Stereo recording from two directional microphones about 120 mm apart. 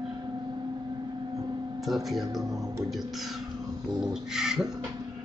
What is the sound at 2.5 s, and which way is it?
Speech, 30° right (ahead or behind).